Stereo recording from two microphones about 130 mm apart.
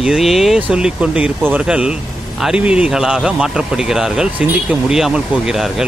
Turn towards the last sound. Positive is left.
turn(degrees=-5)  # may be behind; listen again after turning